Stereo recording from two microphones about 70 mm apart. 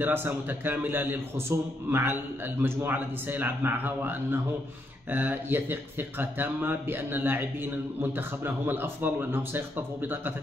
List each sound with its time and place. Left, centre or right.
0.0 s speech: right